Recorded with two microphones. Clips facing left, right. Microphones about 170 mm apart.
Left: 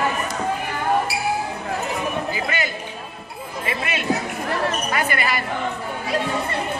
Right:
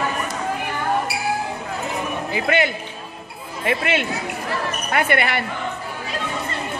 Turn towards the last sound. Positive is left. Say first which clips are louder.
# right 3 dB
turn(degrees=-65)  # may be behind; listen again after turning